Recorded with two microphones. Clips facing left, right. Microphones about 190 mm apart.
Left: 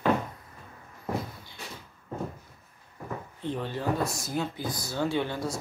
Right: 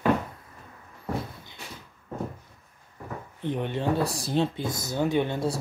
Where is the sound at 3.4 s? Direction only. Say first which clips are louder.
Right 4 dB; 20° right (ahead or behind).